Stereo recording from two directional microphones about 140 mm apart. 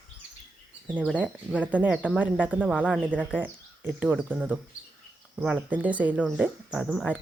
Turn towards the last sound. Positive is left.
turn(degrees=-5)  # may be behind; listen again after turning